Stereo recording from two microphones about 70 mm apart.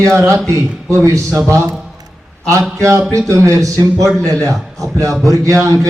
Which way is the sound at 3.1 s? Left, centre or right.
Right.